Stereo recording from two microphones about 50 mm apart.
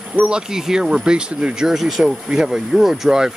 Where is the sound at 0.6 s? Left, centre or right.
Centre.